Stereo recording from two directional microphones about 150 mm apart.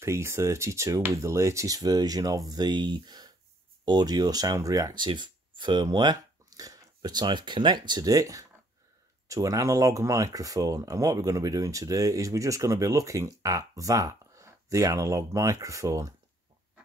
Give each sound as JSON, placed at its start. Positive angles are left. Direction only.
{"t": 0.0, "sound": "speech", "side_deg": -20}